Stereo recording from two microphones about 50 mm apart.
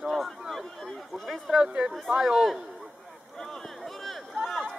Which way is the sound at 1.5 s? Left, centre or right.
Centre.